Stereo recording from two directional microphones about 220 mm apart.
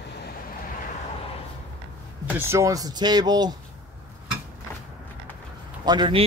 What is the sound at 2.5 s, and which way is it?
Speech, 15° right (ahead or behind).